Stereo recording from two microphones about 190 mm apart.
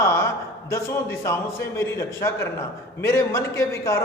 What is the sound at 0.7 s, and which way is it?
A man's voice, 15° left (ahead or behind).